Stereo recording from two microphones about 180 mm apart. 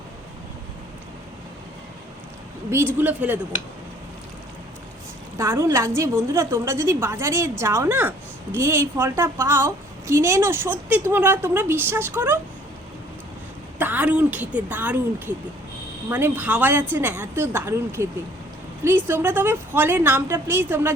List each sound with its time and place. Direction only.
3.0 s a woman's voice: 10° right (ahead or behind)
5.4 s a woman's voice: 15° right (ahead or behind)
13.7 s a woman's voice: 10° right (ahead or behind)
16.0 s a woman's voice: 10° right (ahead or behind)